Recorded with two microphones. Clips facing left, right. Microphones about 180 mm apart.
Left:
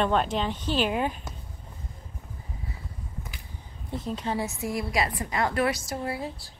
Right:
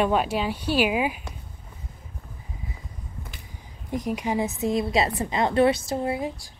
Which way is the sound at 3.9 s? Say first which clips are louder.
Right 4 dB; 15° right (ahead or behind).